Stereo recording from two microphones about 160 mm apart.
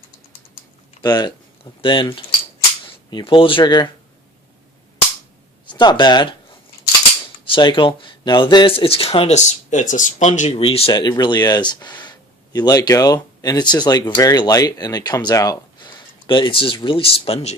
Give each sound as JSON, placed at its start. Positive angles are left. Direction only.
{"t": 1.0, "sound": "speech", "side_deg": 25}
{"t": 5.6, "sound": "speech", "side_deg": 30}
{"t": 7.4, "sound": "speech", "side_deg": 30}
{"t": 10.6, "sound": "speech", "side_deg": 35}